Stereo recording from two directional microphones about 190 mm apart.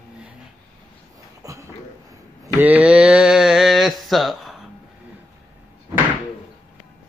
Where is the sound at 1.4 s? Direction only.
20° right (ahead or behind).